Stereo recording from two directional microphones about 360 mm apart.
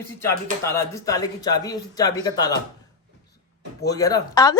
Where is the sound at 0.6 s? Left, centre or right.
Centre.